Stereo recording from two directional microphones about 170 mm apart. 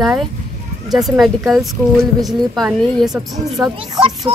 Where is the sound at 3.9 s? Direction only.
25° right (ahead or behind).